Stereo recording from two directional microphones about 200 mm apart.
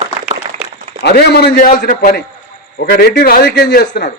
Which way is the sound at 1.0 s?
55° left (ahead or behind).